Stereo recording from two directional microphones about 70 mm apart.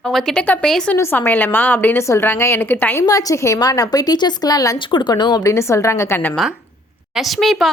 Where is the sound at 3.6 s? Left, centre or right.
Left.